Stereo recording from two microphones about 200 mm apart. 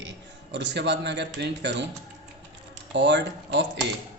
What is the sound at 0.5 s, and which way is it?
A man's voice, 60° right (ahead or behind).